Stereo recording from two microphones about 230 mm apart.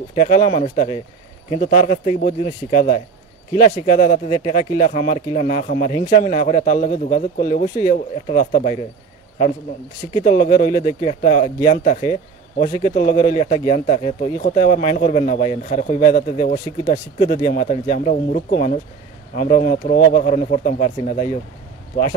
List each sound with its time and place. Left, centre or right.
0.1 s speech: left
10.1 s speech: left